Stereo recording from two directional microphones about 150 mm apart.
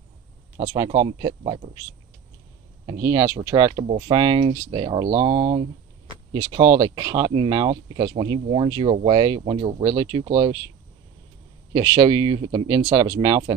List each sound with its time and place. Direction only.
0.8 s speech: 40° right (ahead or behind)
2.9 s speech: 20° right (ahead or behind); by 5.7 s 40° right (ahead or behind)
6.5 s speech: 30° right (ahead or behind)
11.7 s speech: 30° right (ahead or behind)